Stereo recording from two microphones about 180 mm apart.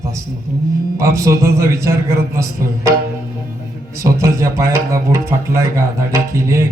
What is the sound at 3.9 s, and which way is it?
Speech, 15° right (ahead or behind).